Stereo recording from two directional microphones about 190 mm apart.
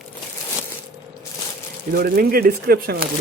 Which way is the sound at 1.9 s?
55° right (ahead or behind).